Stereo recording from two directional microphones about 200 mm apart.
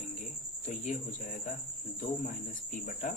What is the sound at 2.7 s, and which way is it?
Speech, 40° left (ahead or behind).